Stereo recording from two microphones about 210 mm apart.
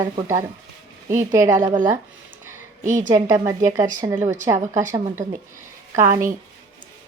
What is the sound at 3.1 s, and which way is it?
A woman's voice, 15° right (ahead or behind).